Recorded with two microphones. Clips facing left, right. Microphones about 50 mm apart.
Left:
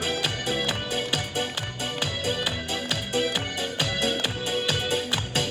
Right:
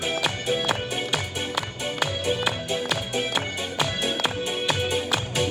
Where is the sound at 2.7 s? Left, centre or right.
Right.